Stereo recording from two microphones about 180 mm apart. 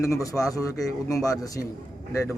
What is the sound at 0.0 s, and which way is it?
A man's voice, 20° left (ahead or behind).